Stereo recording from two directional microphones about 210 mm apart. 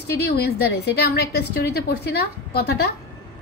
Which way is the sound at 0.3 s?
50° left (ahead or behind).